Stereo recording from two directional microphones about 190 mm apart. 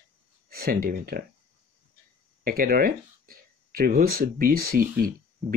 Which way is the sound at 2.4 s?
50° right (ahead or behind).